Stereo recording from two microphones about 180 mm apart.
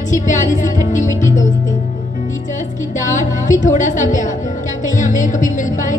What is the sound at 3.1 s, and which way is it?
A woman's voice, 45° left (ahead or behind).